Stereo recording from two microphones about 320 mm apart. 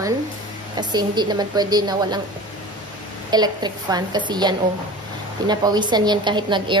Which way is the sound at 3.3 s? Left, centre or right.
Centre.